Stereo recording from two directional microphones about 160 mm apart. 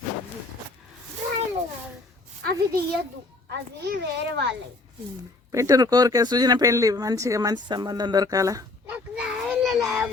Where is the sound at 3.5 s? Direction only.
90° right.